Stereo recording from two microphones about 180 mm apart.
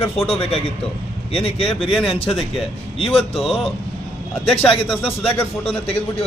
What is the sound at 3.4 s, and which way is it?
Speech, centre (ahead or behind).